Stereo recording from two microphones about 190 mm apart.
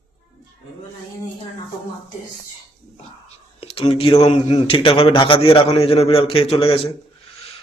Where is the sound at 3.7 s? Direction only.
30° left (ahead or behind).